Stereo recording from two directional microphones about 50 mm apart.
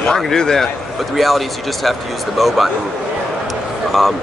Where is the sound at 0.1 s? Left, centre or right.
Centre.